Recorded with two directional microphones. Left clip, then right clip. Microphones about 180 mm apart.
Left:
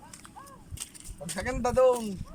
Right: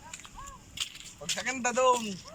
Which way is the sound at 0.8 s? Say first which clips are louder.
Right 7 dB; 35° left (ahead or behind).